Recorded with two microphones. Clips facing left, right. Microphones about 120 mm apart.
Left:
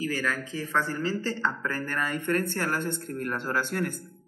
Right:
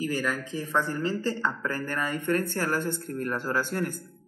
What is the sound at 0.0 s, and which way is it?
Speech, 15° right (ahead or behind).